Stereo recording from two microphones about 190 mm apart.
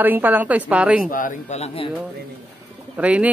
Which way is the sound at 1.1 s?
45° left (ahead or behind).